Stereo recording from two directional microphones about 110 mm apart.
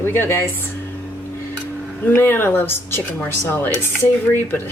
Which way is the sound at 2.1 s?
20° left (ahead or behind).